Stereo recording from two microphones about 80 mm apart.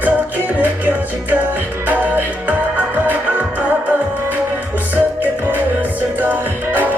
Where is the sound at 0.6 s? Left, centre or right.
Right.